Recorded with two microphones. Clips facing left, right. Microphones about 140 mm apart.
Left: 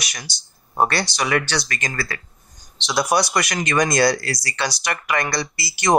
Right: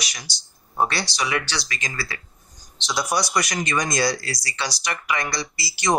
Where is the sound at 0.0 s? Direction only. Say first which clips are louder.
Left 2 dB; 55° left (ahead or behind).